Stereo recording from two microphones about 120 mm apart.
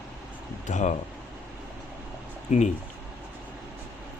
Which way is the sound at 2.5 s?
90° left.